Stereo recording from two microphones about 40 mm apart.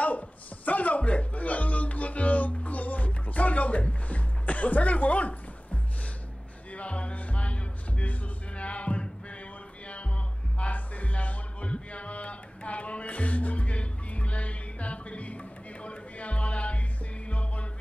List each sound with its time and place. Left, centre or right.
0.7 s music: left
10.6 s music: left